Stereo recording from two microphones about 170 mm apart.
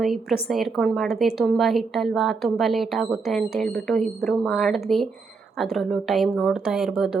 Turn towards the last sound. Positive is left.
turn(degrees=-5)  # may be behind; listen again after turning